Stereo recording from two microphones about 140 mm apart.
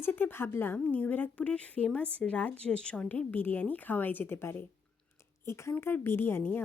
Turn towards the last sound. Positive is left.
turn(degrees=15)  # may be behind; listen again after turning